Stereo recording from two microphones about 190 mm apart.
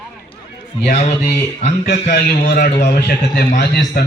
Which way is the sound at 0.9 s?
35° left (ahead or behind).